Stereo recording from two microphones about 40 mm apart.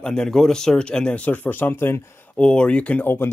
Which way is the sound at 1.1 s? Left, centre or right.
Left.